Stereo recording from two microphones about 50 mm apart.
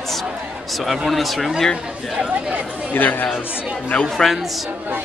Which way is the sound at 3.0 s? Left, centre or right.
Left.